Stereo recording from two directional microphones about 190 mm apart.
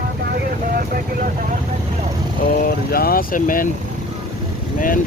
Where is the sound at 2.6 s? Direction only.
50° left (ahead or behind).